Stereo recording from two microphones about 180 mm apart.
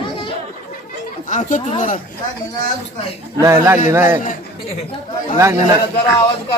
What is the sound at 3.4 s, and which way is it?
Speech, 15° right (ahead or behind).